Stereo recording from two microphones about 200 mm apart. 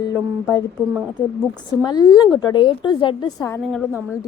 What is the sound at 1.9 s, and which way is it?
A woman's voice, 20° left (ahead or behind).